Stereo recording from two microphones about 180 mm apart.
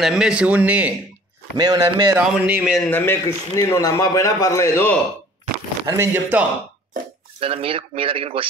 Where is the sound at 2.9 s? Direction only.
15° left (ahead or behind).